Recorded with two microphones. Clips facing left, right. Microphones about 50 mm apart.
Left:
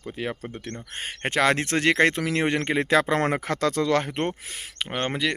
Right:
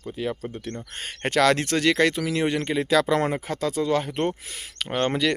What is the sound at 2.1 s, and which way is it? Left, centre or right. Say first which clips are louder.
Speech: even; left.